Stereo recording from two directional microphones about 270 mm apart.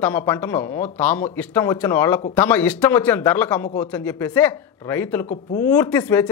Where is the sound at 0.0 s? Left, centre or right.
Centre.